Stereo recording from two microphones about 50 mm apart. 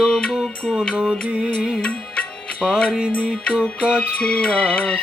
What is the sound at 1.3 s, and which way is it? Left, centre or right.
Mantra, centre.